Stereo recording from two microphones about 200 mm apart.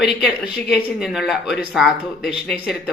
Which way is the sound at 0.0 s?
Centre (ahead or behind).